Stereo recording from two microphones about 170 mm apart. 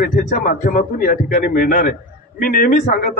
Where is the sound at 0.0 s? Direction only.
55° left (ahead or behind).